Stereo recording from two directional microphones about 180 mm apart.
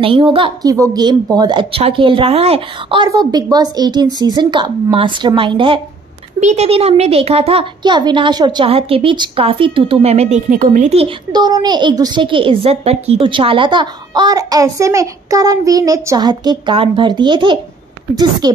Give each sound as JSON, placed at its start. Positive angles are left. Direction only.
{"t": 0.0, "sound": "a woman's voice", "side_deg": -30}
{"t": 11.3, "sound": "a woman's voice", "side_deg": -20}